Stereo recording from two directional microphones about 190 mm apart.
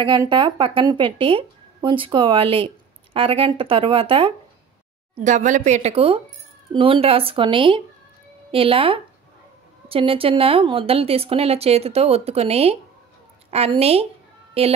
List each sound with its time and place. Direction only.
0.0 s speech: 25° right (ahead or behind)
5.2 s a woman's voice: 40° right (ahead or behind)